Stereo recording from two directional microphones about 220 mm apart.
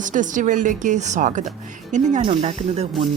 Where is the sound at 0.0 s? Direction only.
35° right (ahead or behind).